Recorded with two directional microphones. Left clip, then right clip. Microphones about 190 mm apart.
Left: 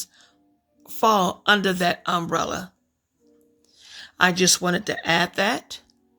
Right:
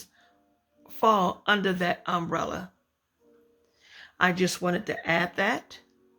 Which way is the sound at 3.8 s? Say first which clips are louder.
Left 5 dB; 25° left (ahead or behind).